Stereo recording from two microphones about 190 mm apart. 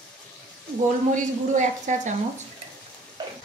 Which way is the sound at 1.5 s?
40° right (ahead or behind).